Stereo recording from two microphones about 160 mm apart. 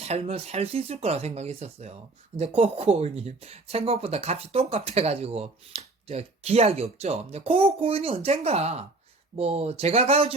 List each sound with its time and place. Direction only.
0.0 s speech: 40° right (ahead or behind)